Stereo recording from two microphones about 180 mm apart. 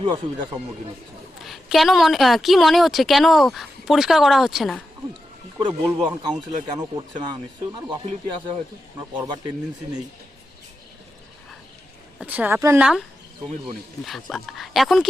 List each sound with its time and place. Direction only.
0.0 s speech: 25° right (ahead or behind)
1.4 s a woman's voice: centre (ahead or behind)
5.5 s speech: 25° right (ahead or behind)
9.0 s speech: 25° right (ahead or behind)
12.2 s speech: 10° right (ahead or behind)
12.8 s a woman's voice: 5° right (ahead or behind)